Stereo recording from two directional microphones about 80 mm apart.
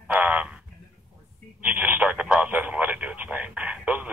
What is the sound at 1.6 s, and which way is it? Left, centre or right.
Speech, centre.